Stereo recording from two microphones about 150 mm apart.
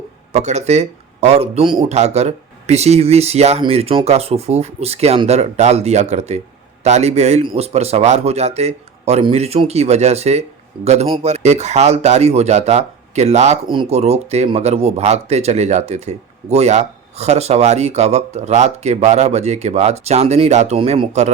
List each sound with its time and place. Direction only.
0.3 s speech: 50° right (ahead or behind)